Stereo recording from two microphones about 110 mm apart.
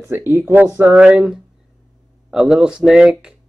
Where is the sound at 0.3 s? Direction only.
15° right (ahead or behind).